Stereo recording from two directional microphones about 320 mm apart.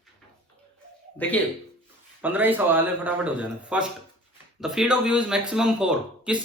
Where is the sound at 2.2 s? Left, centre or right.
Centre.